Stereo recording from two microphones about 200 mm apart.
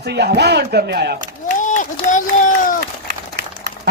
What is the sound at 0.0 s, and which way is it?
A man's voice, 55° right (ahead or behind).